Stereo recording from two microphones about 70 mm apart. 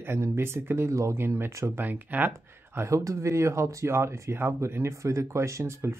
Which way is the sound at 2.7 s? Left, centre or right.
Right.